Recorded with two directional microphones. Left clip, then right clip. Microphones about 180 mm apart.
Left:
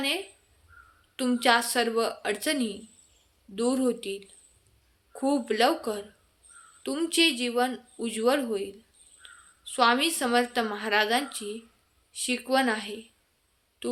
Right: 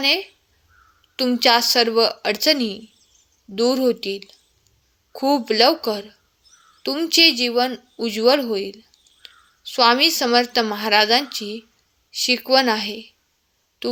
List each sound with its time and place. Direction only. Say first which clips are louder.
1.1 s a woman's voice: right 7 dB; 30° right (ahead or behind)